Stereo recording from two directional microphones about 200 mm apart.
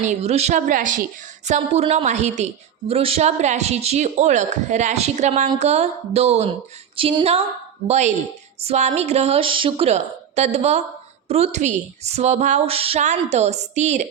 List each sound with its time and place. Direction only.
0.0 s a woman's voice: 35° right (ahead or behind)
6.9 s music: 25° right (ahead or behind)
7.9 s a woman's voice: 35° right (ahead or behind)